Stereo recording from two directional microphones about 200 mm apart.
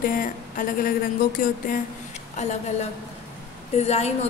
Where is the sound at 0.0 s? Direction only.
40° left (ahead or behind).